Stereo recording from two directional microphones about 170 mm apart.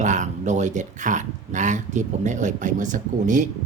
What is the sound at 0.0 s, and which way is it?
Speech, 45° right (ahead or behind).